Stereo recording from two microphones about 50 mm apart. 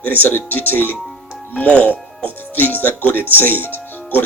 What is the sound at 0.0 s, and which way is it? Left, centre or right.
Speech, left.